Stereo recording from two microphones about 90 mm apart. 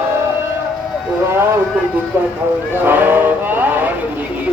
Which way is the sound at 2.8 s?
20° right (ahead or behind).